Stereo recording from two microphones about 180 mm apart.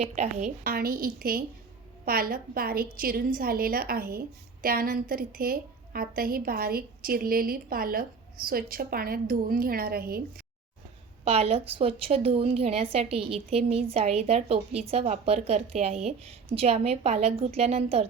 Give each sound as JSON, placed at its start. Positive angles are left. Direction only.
{"t": 0.0, "sound": "a woman's voice", "side_deg": -40}
{"t": 11.3, "sound": "a woman's voice", "side_deg": -35}